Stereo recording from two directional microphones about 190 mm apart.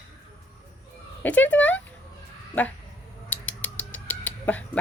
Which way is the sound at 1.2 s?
10° left (ahead or behind).